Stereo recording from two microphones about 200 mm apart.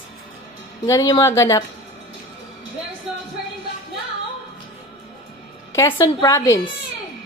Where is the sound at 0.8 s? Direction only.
15° left (ahead or behind).